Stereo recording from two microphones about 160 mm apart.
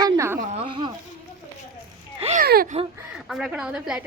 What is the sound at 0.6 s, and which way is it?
Speech, 30° right (ahead or behind).